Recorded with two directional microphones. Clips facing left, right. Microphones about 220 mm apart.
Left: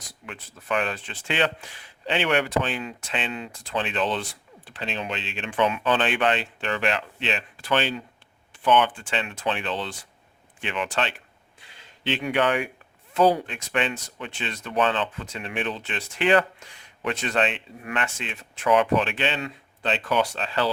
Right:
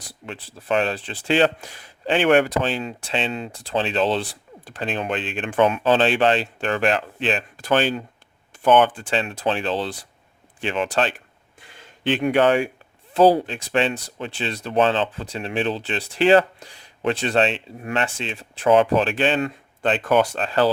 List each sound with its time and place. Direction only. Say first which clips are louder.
0.1 s speech: right 5 dB; 30° right (ahead or behind); by 2.6 s 45° right (ahead or behind)
2.6 s speech: right 3 dB; 30° right (ahead or behind); by 5.8 s 45° right (ahead or behind)
5.8 s speech: right 5 dB; 30° right (ahead or behind)
6.6 s speech: right 5 dB; 45° right (ahead or behind)
12.0 s speech: right 6 dB; 50° right (ahead or behind)
12.4 s speech: right 5 dB; 30° right (ahead or behind)
19.2 s speech: right 7 dB; 50° right (ahead or behind)